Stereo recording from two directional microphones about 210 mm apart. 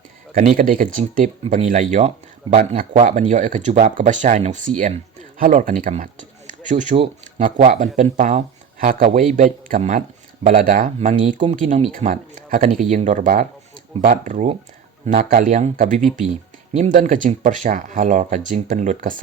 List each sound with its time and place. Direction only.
0.3 s speech: 40° right (ahead or behind)
9.0 s a man's voice: 25° right (ahead or behind)
9.3 s speech: 40° right (ahead or behind)